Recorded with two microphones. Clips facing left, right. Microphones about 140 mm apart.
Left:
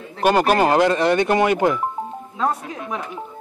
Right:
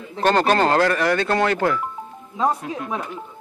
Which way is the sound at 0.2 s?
10° left (ahead or behind).